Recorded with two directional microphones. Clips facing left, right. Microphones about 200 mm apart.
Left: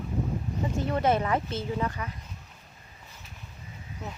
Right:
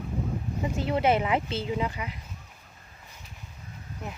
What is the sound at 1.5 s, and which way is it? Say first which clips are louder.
Speech: right 1 dB; 25° right (ahead or behind).